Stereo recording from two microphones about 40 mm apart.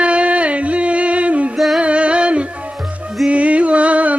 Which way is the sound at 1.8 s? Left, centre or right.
Right.